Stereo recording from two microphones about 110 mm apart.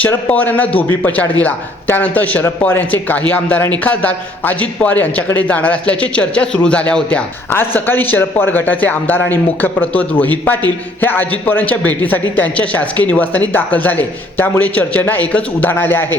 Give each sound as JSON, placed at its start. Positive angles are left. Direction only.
{"t": 0.3, "sound": "a man's voice", "side_deg": 15}